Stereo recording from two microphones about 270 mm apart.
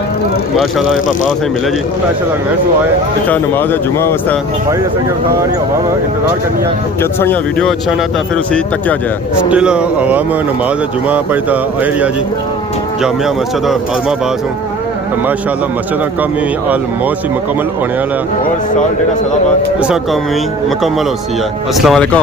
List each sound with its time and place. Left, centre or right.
0.5 s speech: centre
3.2 s speech: centre
7.0 s speech: centre
9.5 s speech: centre
21.8 s speech: centre